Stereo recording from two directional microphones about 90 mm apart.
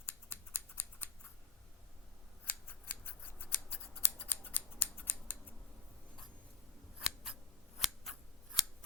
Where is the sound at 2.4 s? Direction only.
20° left (ahead or behind).